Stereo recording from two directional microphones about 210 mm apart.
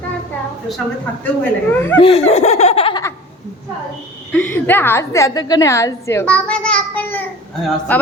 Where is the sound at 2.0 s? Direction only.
30° left (ahead or behind).